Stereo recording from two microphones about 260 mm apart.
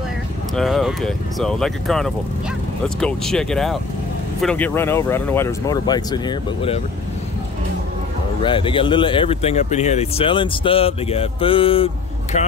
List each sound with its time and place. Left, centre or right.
0.6 s speech: centre
8.4 s speech: centre